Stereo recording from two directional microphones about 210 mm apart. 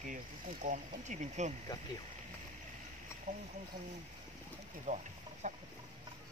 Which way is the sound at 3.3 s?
30° right (ahead or behind).